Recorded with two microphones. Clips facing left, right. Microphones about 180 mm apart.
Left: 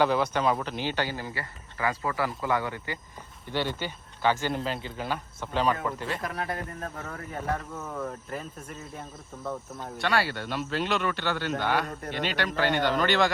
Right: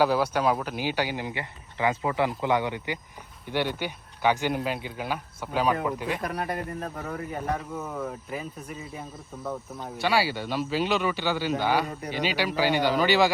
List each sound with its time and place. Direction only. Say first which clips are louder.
0.0 s speech: right 1 dB; 5° right (ahead or behind)